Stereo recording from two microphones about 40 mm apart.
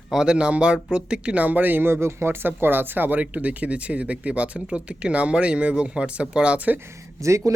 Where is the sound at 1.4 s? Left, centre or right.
Right.